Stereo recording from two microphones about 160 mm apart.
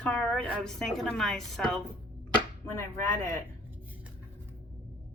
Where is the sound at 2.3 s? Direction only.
15° left (ahead or behind).